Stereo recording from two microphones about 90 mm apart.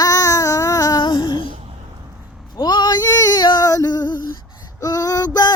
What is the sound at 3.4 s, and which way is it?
Female singing, 55° left (ahead or behind).